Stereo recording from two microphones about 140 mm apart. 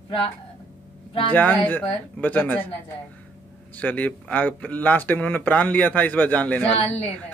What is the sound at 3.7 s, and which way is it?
A man's voice, 10° left (ahead or behind).